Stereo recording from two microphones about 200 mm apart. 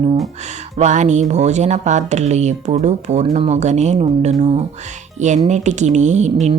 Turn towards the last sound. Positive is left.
turn(degrees=-35)  # may be behind; listen again after turning